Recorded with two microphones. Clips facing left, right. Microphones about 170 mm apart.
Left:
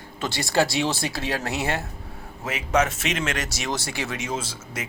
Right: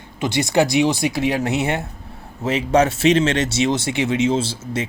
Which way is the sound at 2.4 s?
30° right (ahead or behind).